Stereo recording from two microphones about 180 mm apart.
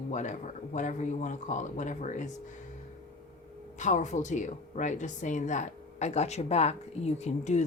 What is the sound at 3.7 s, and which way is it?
A woman's voice, 40° left (ahead or behind).